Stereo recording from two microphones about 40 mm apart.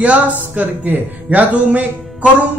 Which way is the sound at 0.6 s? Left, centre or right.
Right.